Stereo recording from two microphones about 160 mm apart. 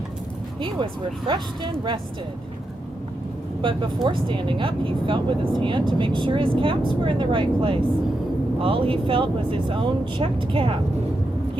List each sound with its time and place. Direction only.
1.3 s speech: 30° right (ahead or behind)
3.6 s speech: 30° right (ahead or behind)